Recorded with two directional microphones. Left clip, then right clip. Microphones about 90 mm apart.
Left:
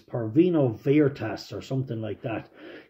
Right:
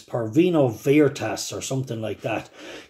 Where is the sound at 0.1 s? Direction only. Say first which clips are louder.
Right 2 dB; 20° right (ahead or behind).